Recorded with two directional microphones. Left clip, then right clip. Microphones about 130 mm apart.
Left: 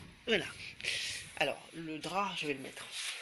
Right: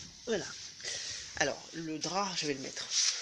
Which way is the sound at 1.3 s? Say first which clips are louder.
Right 2 dB; 40° right (ahead or behind).